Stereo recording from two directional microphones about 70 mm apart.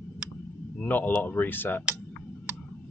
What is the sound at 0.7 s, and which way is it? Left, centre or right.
Speech, left.